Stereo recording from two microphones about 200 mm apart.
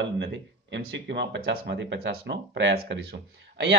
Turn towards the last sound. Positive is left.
turn(degrees=-65)  # may be behind; listen again after turning